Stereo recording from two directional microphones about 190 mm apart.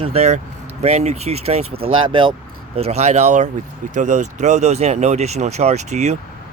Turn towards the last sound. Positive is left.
turn(degrees=-35)  # may be behind; listen again after turning